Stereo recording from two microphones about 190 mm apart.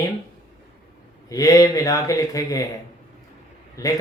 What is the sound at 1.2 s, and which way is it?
Speech, 20° left (ahead or behind).